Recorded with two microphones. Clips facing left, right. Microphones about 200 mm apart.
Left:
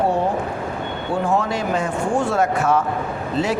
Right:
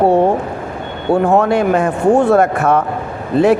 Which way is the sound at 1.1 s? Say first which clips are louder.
Right 9 dB; 60° right (ahead or behind).